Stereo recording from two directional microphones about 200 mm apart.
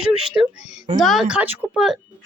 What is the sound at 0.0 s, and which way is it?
Speech, 5° right (ahead or behind).